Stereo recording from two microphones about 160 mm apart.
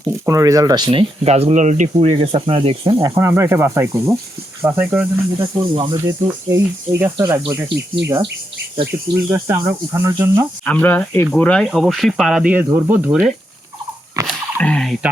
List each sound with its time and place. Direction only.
0.3 s speech: 20° right (ahead or behind); by 2.1 s 50° right (ahead or behind)
2.1 s speech: 40° right (ahead or behind)
3.0 s speech: 15° right (ahead or behind)
5.4 s speech: 30° right (ahead or behind)
6.2 s speech: 15° right (ahead or behind)
8.8 s speech: 15° right (ahead or behind)
10.7 s speech: 10° left (ahead or behind); by 13.1 s 10° right (ahead or behind)
14.3 s a sound: 5° left (ahead or behind)